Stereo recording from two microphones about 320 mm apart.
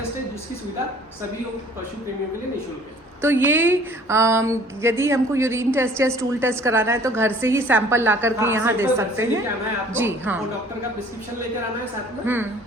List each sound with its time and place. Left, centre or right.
3.2 s speech: centre
12.2 s speech: centre